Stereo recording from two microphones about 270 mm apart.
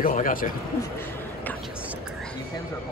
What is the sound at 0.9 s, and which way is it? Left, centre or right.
Whispering, centre.